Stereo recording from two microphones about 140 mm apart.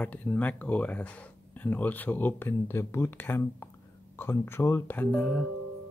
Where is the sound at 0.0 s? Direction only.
10° left (ahead or behind).